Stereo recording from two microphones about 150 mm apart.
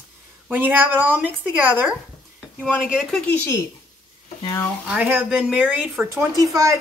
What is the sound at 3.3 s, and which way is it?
Speech, 10° left (ahead or behind).